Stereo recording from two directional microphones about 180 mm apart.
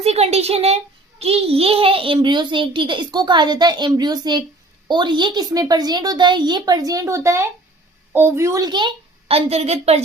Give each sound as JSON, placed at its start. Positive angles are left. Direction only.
{"t": 0.0, "sound": "a child's voice", "side_deg": -35}